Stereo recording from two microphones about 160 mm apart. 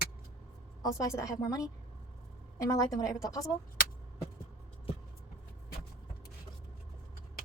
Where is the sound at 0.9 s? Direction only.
20° left (ahead or behind).